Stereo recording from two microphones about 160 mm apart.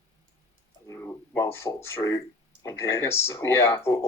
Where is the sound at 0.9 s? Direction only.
15° left (ahead or behind).